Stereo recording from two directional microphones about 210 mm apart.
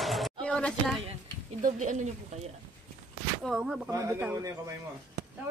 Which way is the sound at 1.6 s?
35° right (ahead or behind).